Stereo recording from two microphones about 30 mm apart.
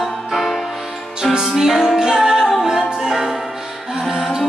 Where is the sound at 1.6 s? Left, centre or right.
Centre.